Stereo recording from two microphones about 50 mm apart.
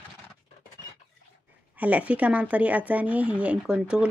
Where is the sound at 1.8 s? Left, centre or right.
Right.